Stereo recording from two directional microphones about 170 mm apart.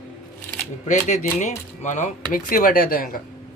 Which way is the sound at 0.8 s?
45° left (ahead or behind).